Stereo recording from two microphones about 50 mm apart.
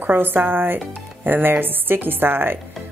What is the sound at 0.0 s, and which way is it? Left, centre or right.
Speech, right.